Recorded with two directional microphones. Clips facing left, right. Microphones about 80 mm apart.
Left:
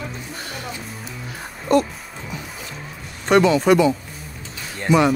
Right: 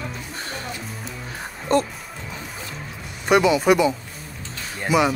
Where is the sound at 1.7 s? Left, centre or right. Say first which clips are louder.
Left 3 dB; right.